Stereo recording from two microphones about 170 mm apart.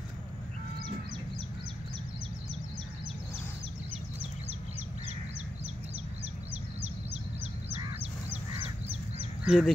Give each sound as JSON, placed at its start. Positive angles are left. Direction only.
{"t": 7.7, "sound": "goose", "side_deg": -35}
{"t": 9.4, "sound": "speech", "side_deg": -5}